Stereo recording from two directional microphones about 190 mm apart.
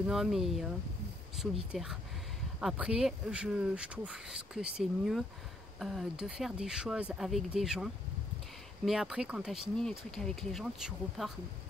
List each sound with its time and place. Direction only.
0.0 s speech: centre (ahead or behind)